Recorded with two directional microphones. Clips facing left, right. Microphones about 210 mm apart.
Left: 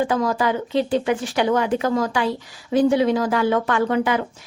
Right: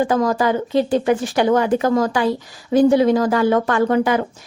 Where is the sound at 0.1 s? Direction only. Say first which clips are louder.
Right 3 dB; 45° right (ahead or behind).